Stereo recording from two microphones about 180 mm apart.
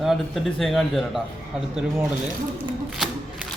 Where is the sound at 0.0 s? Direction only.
Centre (ahead or behind).